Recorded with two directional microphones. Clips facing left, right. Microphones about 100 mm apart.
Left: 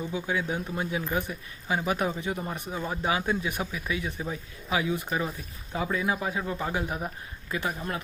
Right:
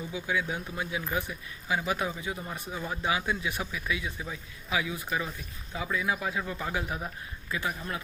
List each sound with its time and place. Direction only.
0.0 s speech: 35° left (ahead or behind); by 3.0 s 20° left (ahead or behind)
3.0 s speech: 35° left (ahead or behind)